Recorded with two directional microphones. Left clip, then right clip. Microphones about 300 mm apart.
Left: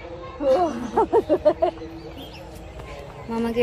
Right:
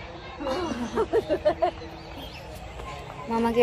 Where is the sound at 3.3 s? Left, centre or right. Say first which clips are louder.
Right 1 dB; centre.